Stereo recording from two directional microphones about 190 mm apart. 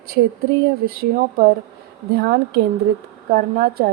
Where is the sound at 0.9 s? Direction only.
50° right (ahead or behind).